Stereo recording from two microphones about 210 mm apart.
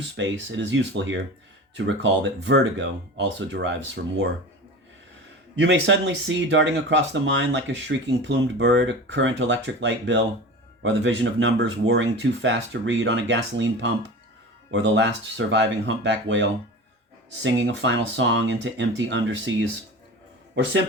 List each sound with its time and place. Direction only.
0.2 s speech: 65° right (ahead or behind)
5.5 s speech: 60° right (ahead or behind)
14.7 s speech: 60° right (ahead or behind)